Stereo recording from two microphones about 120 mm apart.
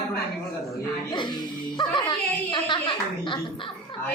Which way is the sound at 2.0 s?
40° left (ahead or behind).